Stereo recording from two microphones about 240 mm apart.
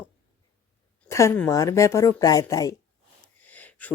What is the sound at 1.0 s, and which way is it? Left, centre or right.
A woman's voice, centre.